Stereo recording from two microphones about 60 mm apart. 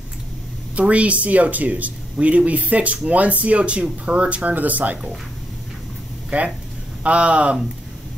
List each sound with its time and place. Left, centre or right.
0.7 s speech: right
7.0 s speech: right